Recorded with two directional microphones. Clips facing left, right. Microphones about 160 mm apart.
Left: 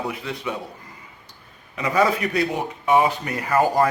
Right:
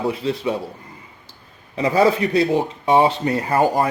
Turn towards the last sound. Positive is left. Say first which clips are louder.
# right 1 dB
turn(degrees=-25)  # may be behind; listen again after turning